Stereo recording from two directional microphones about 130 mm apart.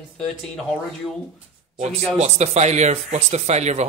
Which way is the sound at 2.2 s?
60° right (ahead or behind).